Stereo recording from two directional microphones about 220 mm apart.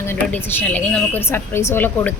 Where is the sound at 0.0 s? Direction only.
10° left (ahead or behind).